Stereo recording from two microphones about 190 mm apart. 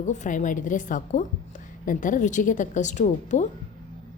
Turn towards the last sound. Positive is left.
turn(degrees=40)  # may be behind; listen again after turning